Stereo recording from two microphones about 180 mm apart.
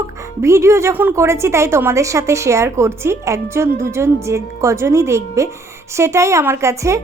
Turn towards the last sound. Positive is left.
turn(degrees=-15)  # may be behind; listen again after turning